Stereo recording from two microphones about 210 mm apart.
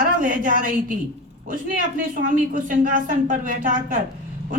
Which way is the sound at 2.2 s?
40° right (ahead or behind).